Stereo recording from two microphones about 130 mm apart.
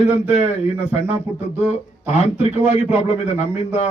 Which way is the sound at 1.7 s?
55° left (ahead or behind).